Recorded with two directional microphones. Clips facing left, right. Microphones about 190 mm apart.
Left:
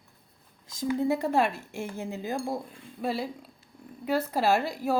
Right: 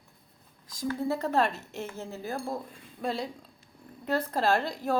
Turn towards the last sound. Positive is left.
turn(degrees=10)  # may be behind; listen again after turning